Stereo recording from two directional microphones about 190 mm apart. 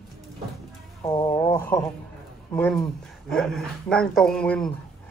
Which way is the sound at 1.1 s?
25° left (ahead or behind).